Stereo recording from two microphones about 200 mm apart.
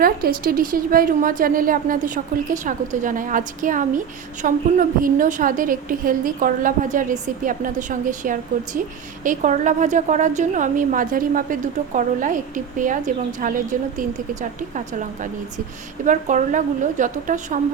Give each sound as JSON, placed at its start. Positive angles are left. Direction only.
{"t": 0.0, "sound": "a woman's voice", "side_deg": -50}